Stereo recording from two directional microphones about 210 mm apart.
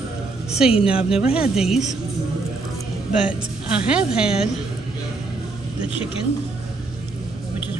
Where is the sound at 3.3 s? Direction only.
5° right (ahead or behind).